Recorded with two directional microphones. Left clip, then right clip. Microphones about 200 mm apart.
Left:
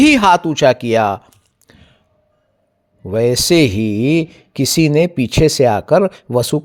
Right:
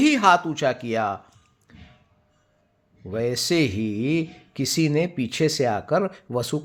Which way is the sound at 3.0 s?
40° left (ahead or behind).